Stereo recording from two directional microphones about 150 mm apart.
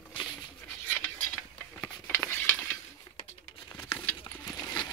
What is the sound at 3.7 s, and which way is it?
Crumpling, 30° left (ahead or behind).